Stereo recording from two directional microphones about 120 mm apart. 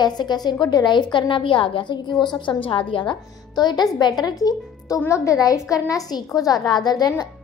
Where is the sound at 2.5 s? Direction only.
45° left (ahead or behind).